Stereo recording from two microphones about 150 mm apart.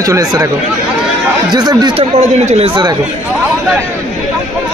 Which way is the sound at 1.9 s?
45° right (ahead or behind).